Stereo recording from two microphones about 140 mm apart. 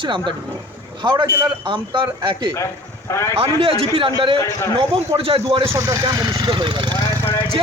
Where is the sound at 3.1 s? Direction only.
20° left (ahead or behind).